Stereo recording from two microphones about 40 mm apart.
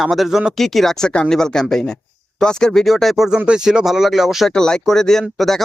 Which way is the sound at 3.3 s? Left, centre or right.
Centre.